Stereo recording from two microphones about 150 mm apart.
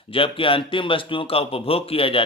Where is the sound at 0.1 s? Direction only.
35° left (ahead or behind).